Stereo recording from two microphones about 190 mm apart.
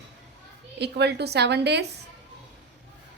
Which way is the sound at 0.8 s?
60° right (ahead or behind).